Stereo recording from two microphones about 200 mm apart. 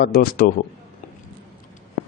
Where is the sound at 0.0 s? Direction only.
50° left (ahead or behind).